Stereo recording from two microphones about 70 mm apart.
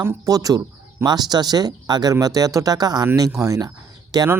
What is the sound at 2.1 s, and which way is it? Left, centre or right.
Speech, right.